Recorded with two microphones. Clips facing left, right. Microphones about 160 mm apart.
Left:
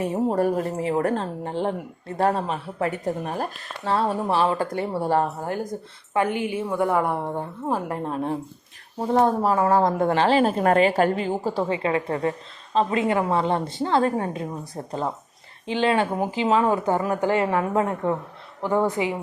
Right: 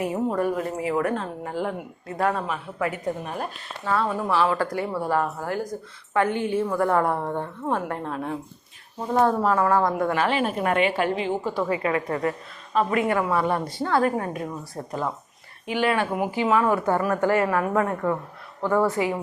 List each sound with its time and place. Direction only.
0.0 s a woman's voice: 30° left (ahead or behind)
5.5 s a woman's voice: 20° left (ahead or behind); by 7.8 s 5° left (ahead or behind)
7.9 s a woman's voice: 25° left (ahead or behind)